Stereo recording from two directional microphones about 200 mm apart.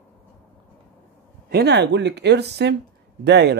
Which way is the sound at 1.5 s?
55° right (ahead or behind).